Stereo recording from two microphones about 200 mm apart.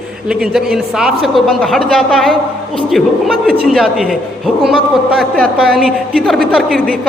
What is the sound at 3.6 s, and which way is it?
A man's voice, centre (ahead or behind).